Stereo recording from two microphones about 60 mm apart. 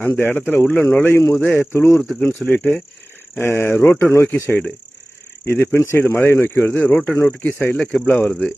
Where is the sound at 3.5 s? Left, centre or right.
Left.